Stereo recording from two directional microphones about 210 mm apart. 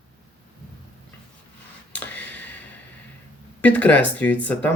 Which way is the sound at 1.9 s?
5° left (ahead or behind).